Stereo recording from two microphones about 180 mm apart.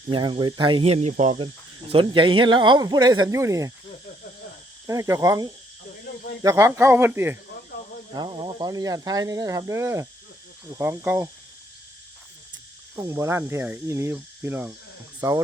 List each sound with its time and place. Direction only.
0.1 s speech: 30° right (ahead or behind)
1.9 s speech: 30° right (ahead or behind)
4.9 s speech: 15° right (ahead or behind)
8.1 s speech: 25° right (ahead or behind)
13.0 s speech: 15° right (ahead or behind)